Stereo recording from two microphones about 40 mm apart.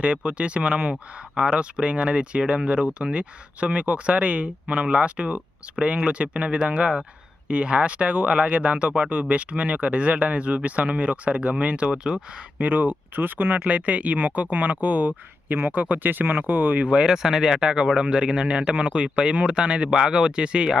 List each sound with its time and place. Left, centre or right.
0.0 s speech: right
12.1 s speech: centre
12.5 s speech: right
13.7 s speech: right
15.5 s speech: right
16.8 s speech: right
17.1 s speech: centre
17.6 s speech: right